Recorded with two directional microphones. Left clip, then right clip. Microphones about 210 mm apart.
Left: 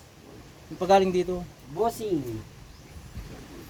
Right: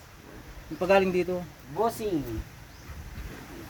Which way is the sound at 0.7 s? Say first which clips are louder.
Left 2 dB; 30° left (ahead or behind).